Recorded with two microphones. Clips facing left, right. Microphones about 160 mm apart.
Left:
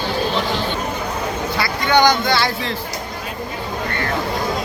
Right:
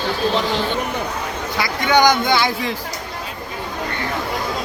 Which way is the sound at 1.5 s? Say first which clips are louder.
Right 1 dB; 15° right (ahead or behind).